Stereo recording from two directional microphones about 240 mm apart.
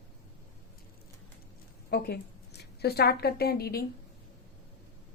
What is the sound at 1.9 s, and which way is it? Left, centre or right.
A woman's voice, left.